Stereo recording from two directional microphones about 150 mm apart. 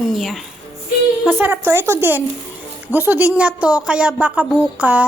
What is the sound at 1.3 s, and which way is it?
A woman's voice, 15° right (ahead or behind).